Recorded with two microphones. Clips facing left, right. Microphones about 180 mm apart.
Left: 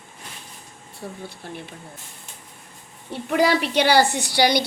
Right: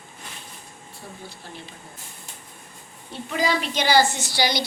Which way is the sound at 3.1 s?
65° left (ahead or behind).